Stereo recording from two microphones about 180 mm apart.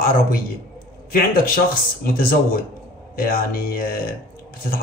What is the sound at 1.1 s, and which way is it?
Speech, 50° left (ahead or behind).